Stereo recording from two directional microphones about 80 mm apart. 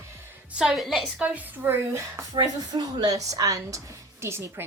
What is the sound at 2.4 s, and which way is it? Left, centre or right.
Speech, right.